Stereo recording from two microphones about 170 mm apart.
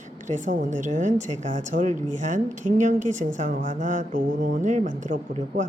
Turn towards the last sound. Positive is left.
turn(degrees=-50)  # may be behind; listen again after turning